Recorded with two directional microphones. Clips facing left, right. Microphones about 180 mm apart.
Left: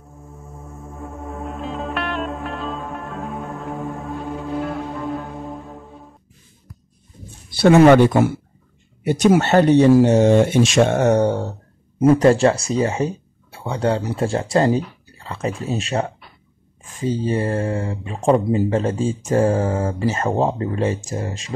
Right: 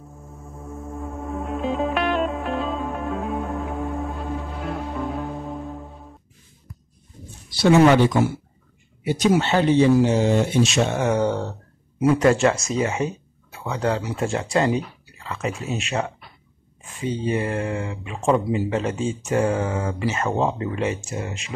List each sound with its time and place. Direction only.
1.0 s music: centre (ahead or behind)
7.5 s speech: 55° left (ahead or behind); by 21.5 s 35° left (ahead or behind)